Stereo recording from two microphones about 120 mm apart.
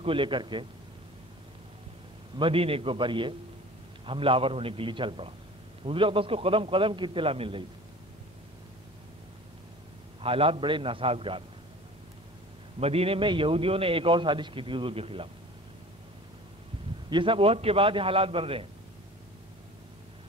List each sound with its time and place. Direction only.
0.0 s a man's voice: 45° right (ahead or behind)
2.3 s a man's voice: 50° right (ahead or behind)
10.2 s a man's voice: 50° right (ahead or behind)
12.8 s a man's voice: 55° right (ahead or behind)
17.1 s a man's voice: 45° right (ahead or behind)